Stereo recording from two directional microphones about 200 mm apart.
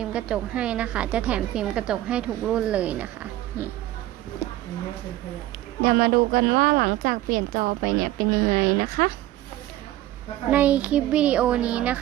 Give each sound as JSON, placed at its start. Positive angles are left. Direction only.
{"t": 0.0, "sound": "a woman's voice", "side_deg": -5}
{"t": 5.8, "sound": "a woman's voice", "side_deg": -45}
{"t": 10.5, "sound": "a child's voice", "side_deg": -5}